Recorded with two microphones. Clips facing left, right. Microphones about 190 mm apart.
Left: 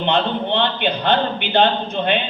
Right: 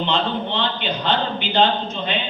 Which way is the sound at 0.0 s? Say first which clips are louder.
Left 3 dB; 60° left (ahead or behind).